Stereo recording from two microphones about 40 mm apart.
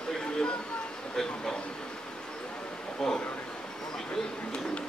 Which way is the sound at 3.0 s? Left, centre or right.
Centre.